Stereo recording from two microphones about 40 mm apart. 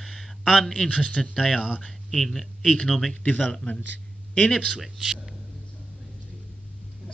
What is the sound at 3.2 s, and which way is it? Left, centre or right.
Speech, left.